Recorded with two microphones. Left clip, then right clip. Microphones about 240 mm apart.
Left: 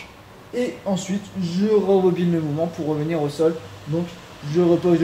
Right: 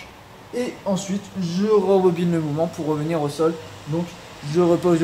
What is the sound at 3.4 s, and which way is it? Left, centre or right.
Speech, centre.